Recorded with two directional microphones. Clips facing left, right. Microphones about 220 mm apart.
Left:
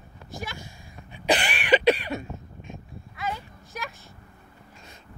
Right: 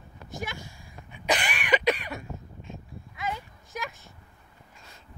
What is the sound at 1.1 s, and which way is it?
Cough, 30° left (ahead or behind).